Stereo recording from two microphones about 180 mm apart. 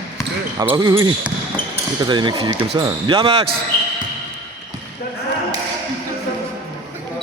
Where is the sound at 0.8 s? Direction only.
20° right (ahead or behind).